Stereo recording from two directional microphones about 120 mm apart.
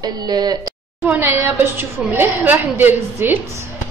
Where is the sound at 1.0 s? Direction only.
15° right (ahead or behind).